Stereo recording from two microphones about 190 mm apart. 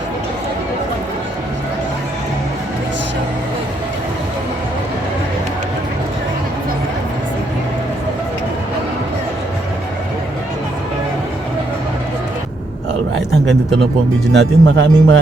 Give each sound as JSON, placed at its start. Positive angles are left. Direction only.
{"t": 14.3, "sound": "speech", "side_deg": -70}